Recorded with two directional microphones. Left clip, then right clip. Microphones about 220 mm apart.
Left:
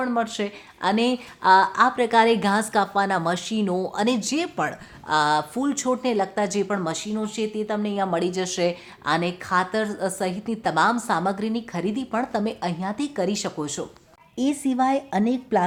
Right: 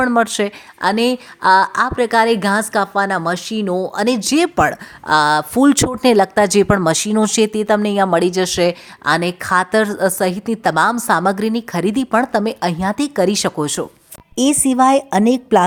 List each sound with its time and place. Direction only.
0.0 s speech: 30° right (ahead or behind)